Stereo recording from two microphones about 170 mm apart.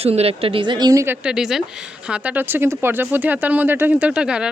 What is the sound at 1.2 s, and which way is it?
Speech, 5° right (ahead or behind).